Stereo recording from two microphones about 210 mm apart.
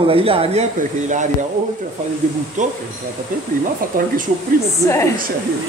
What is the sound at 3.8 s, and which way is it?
Speech, 40° right (ahead or behind).